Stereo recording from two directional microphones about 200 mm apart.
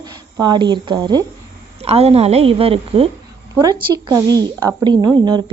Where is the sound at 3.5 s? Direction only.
20° right (ahead or behind).